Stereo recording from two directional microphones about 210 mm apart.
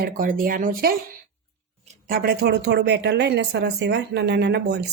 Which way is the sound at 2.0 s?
45° right (ahead or behind).